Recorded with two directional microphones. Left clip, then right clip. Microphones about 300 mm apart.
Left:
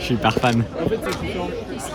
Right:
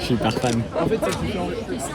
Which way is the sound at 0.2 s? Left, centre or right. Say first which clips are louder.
Left 7 dB; centre.